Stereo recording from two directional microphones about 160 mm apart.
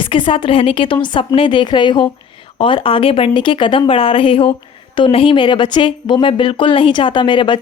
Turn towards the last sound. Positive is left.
turn(degrees=30)  # may be behind; listen again after turning